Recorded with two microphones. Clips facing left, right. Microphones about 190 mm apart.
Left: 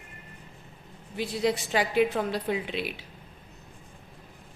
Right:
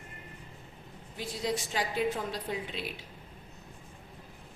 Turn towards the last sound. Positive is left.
turn(degrees=70)  # may be behind; listen again after turning